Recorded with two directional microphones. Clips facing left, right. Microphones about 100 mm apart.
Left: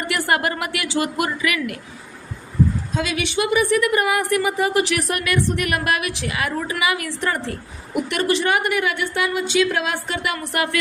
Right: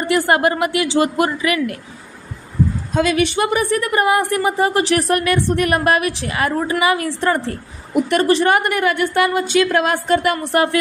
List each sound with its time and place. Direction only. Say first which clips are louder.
0.0 s speech: right 6 dB; 30° right (ahead or behind)
2.9 s a woman's voice: right 6 dB; 45° right (ahead or behind)
10.4 s a woman's voice: right 6 dB; 30° right (ahead or behind)